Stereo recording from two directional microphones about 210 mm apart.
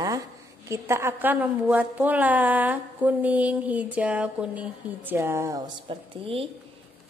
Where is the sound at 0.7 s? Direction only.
15° right (ahead or behind).